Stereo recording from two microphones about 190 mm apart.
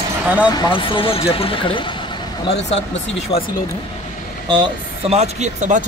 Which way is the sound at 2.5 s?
65° left (ahead or behind).